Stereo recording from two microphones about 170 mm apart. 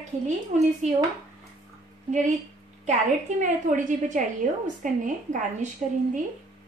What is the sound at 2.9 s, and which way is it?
A woman's voice, 45° right (ahead or behind).